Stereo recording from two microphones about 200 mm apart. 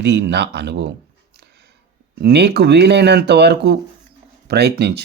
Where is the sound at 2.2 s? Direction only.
55° right (ahead or behind).